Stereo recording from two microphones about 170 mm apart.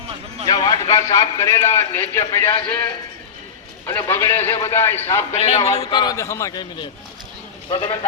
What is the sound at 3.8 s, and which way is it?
A man's voice, 15° left (ahead or behind).